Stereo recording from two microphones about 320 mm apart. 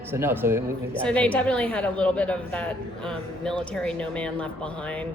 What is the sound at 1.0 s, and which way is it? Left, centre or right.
A woman's voice, centre.